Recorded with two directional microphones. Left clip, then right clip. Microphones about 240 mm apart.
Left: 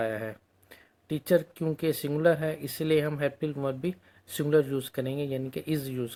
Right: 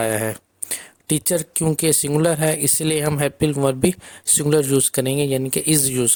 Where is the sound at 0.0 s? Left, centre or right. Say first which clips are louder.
Right 10 dB; right.